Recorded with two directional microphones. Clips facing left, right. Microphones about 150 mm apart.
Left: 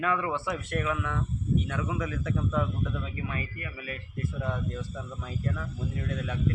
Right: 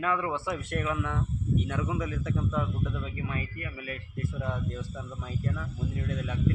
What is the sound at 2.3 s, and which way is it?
Speech, 15° right (ahead or behind).